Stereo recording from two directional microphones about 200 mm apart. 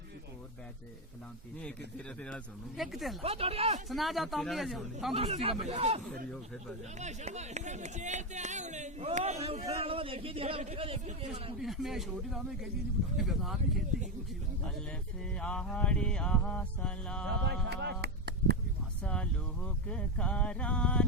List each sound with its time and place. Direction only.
2.2 s mantra: centre (ahead or behind)
3.2 s speech: 30° right (ahead or behind)
3.8 s mantra: centre (ahead or behind)
5.1 s speech: 30° right (ahead or behind)
11.6 s mantra: centre (ahead or behind)
15.4 s mantra: 5° left (ahead or behind)
17.2 s speech: 60° right (ahead or behind)
19.0 s speech: 5° left (ahead or behind)